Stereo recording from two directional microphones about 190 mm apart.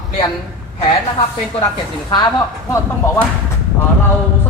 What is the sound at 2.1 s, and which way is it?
Speech, 20° left (ahead or behind).